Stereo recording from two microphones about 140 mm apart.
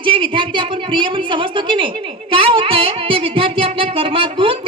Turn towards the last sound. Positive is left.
turn(degrees=-40)  # may be behind; listen again after turning